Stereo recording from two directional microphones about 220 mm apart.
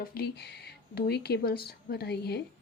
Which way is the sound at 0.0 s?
45° left (ahead or behind).